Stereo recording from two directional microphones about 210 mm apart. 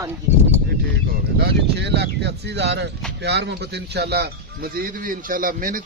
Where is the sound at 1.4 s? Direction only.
50° right (ahead or behind).